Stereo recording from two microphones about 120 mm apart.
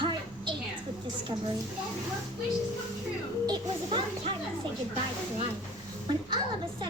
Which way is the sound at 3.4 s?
35° right (ahead or behind).